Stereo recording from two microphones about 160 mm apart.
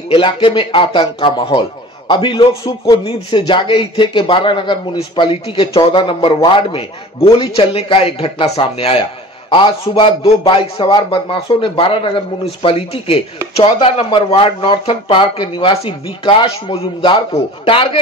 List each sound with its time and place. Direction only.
0.1 s a man's voice: 30° left (ahead or behind)